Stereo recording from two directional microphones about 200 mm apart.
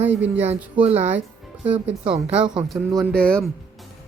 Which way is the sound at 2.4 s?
5° right (ahead or behind).